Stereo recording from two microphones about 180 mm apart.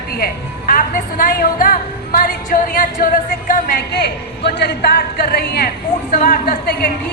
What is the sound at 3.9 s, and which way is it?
A woman's voice, 70° left (ahead or behind).